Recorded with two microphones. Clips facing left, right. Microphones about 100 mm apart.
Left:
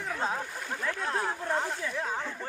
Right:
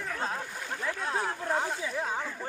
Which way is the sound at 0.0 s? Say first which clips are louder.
Left 2 dB; 10° left (ahead or behind).